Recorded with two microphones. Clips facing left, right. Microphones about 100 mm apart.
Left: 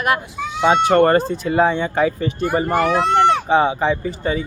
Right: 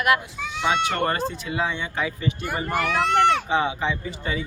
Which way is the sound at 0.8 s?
45° left (ahead or behind).